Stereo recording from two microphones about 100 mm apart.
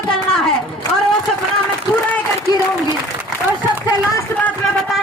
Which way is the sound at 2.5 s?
40° left (ahead or behind).